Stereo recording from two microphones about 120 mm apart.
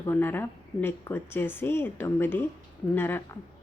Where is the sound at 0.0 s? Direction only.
20° left (ahead or behind).